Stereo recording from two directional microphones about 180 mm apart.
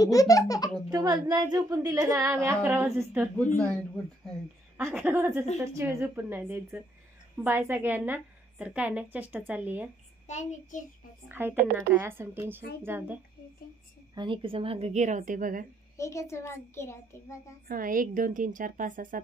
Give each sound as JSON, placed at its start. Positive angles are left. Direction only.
{"t": 0.0, "sound": "speech", "side_deg": 20}
{"t": 0.8, "sound": "a woman's voice", "side_deg": -20}
{"t": 3.5, "sound": "a child's voice", "side_deg": 10}
{"t": 4.7, "sound": "a woman's voice", "side_deg": -10}
{"t": 10.2, "sound": "child singing", "side_deg": 40}
{"t": 11.2, "sound": "a woman's voice", "side_deg": -10}
{"t": 14.1, "sound": "a woman's voice", "side_deg": -30}
{"t": 16.0, "sound": "a child's voice", "side_deg": 15}
{"t": 17.6, "sound": "a woman's voice", "side_deg": -50}